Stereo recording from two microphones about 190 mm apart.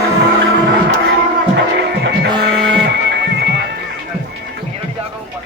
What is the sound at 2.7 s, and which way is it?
Music, 65° right (ahead or behind).